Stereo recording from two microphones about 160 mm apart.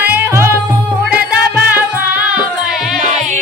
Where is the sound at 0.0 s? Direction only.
10° right (ahead or behind).